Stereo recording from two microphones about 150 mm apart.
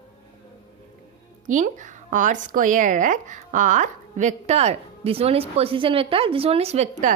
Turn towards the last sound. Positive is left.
turn(degrees=-55)  # may be behind; listen again after turning